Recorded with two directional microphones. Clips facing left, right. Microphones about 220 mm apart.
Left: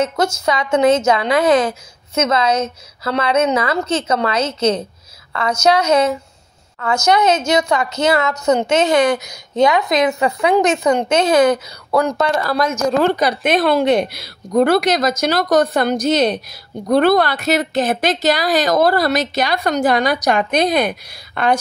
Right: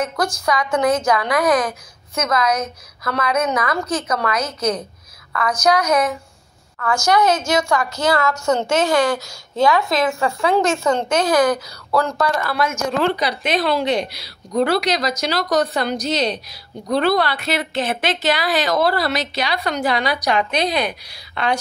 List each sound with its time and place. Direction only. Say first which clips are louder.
0.0 s a woman's voice: left 4 dB; 25° left (ahead or behind)
12.4 s a woman's voice: left 4 dB; 40° left (ahead or behind)